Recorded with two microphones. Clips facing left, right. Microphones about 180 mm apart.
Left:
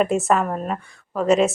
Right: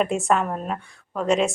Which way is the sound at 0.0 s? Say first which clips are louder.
Left 2 dB; centre (ahead or behind).